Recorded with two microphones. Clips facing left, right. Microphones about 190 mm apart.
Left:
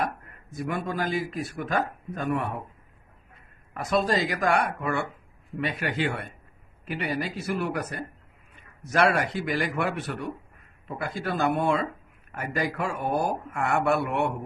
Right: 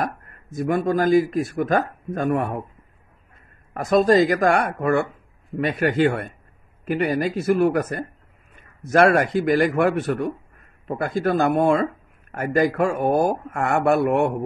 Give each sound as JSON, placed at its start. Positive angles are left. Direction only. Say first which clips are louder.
{"t": 0.0, "sound": "speech", "louder": "right 3 dB", "side_deg": -45}
{"t": 3.7, "sound": "speech", "louder": "right 9 dB", "side_deg": -45}